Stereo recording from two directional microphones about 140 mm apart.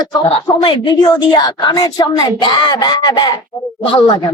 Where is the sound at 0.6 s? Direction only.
30° left (ahead or behind).